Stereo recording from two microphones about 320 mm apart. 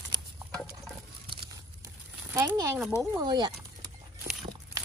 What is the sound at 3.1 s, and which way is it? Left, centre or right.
Speech, centre.